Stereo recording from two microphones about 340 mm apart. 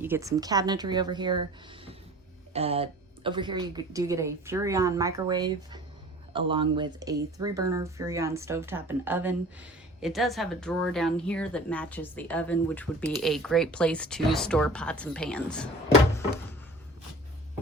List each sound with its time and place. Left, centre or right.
0.0 s speech: centre